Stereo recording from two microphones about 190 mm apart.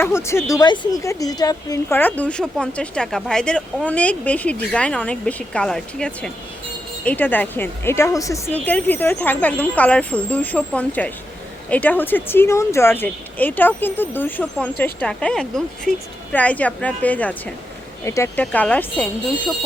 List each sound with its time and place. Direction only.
0.0 s speech: 15° left (ahead or behind)